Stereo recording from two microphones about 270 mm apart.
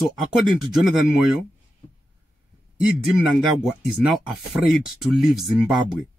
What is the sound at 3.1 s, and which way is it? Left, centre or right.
Speech, centre.